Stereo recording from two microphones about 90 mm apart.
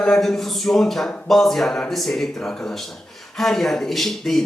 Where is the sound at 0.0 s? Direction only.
5° left (ahead or behind).